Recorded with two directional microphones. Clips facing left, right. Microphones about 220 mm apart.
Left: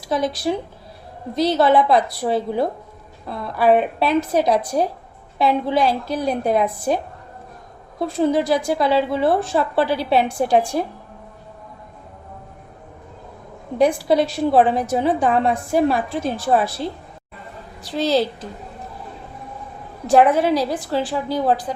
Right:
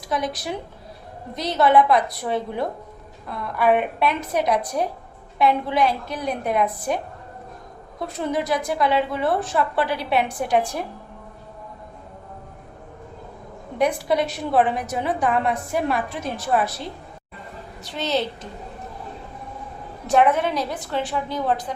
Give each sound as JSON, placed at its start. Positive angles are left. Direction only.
{"t": 0.1, "sound": "a woman's voice", "side_deg": 30}
{"t": 13.7, "sound": "a woman's voice", "side_deg": 30}
{"t": 17.8, "sound": "a woman's voice", "side_deg": 35}
{"t": 20.1, "sound": "a woman's voice", "side_deg": 35}